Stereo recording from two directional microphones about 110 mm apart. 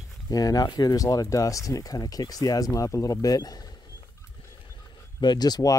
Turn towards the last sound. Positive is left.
turn(degrees=35)  # may be behind; listen again after turning